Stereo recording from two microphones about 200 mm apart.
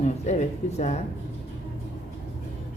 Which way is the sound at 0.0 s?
35° left (ahead or behind).